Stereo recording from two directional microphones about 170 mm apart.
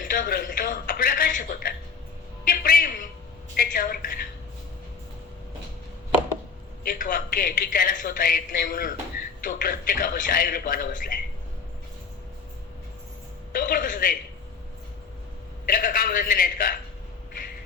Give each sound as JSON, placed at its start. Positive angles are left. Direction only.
{"t": 0.0, "sound": "a man's voice", "side_deg": 50}
{"t": 6.8, "sound": "a woman's voice", "side_deg": 60}
{"t": 13.5, "sound": "a sound", "side_deg": 55}
{"t": 15.6, "sound": "a man's voice", "side_deg": 60}